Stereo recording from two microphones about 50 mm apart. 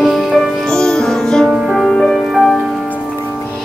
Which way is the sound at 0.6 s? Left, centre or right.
Centre.